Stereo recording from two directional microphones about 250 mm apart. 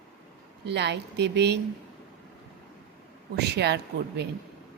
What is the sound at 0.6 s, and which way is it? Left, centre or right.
Speech, right.